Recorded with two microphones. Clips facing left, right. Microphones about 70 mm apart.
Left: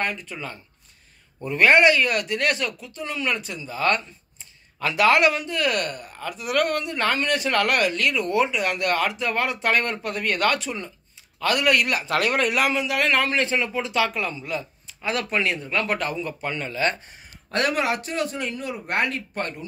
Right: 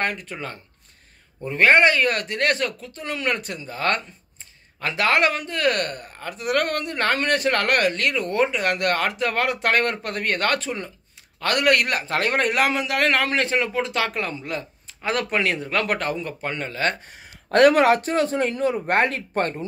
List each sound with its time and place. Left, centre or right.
0.0 s a man's voice: right
1.4 s speech: right
4.7 s a man's voice: right
12.1 s a man's voice: right
16.0 s a man's voice: right